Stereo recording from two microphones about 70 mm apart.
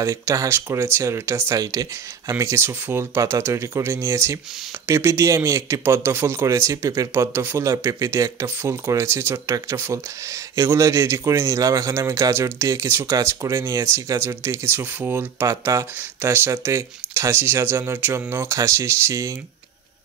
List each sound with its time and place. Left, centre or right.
0.0 s speech: right
1.5 s speech: right
15.4 s speech: right
16.2 s speech: right